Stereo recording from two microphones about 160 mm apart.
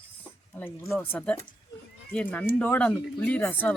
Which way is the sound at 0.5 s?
15° left (ahead or behind).